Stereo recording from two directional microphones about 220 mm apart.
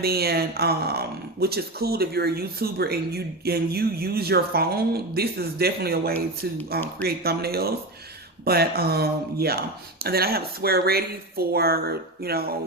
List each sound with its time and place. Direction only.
0.0 s speech: 45° right (ahead or behind)